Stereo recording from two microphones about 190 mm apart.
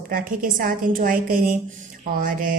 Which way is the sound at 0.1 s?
45° right (ahead or behind).